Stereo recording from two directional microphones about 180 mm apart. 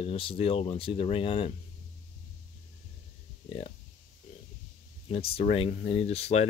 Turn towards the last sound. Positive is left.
turn(degrees=35)  # may be behind; listen again after turning